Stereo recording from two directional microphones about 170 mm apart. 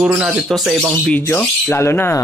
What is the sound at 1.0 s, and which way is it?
Speech, 10° left (ahead or behind).